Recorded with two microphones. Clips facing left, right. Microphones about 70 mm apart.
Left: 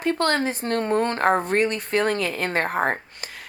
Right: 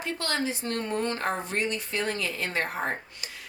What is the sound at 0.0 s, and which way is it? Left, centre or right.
A woman's voice, left.